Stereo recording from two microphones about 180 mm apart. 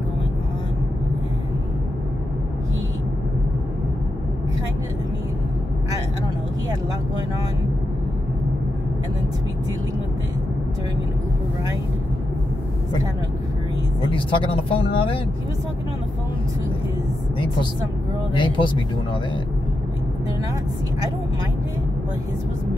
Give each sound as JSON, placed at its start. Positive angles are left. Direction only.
{"t": 14.1, "sound": "speech", "side_deg": 30}
{"t": 18.3, "sound": "speech", "side_deg": 25}